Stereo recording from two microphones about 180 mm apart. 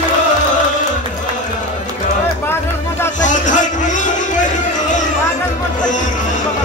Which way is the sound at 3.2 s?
45° left (ahead or behind).